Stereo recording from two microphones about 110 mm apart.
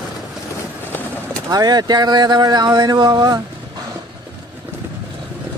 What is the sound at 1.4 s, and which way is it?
Speech, 35° right (ahead or behind).